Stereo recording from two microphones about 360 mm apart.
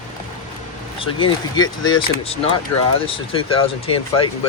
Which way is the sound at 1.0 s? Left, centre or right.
Centre.